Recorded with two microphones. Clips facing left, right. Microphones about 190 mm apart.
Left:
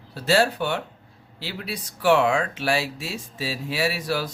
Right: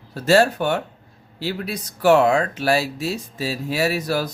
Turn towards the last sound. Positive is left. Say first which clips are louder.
# right 4 dB
turn(degrees=-40)  # may be behind; listen again after turning